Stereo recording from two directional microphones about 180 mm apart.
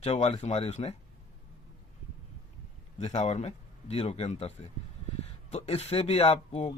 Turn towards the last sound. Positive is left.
turn(degrees=35)  # may be behind; listen again after turning